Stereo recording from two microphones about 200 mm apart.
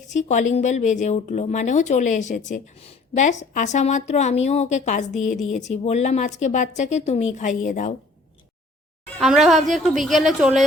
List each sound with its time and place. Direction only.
0.1 s speech: 35° left (ahead or behind)
9.1 s a woman's voice: centre (ahead or behind)